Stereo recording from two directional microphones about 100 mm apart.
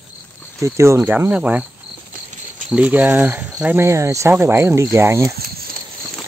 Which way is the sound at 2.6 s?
15° right (ahead or behind).